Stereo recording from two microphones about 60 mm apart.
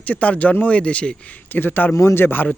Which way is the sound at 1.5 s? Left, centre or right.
Left.